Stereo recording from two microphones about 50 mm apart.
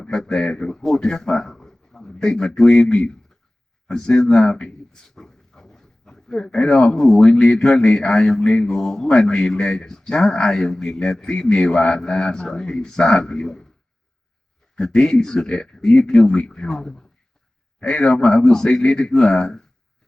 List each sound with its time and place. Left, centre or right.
0.0 s a man's voice: centre
14.8 s a man's voice: centre